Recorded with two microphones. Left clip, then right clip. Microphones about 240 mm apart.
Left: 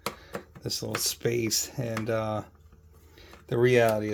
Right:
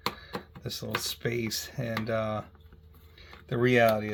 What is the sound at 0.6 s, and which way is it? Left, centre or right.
Speech, left.